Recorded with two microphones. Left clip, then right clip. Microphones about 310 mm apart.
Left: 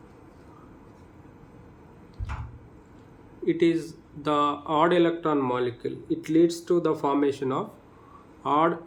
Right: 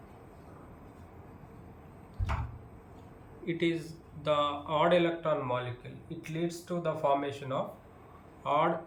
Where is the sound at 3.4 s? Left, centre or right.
Centre.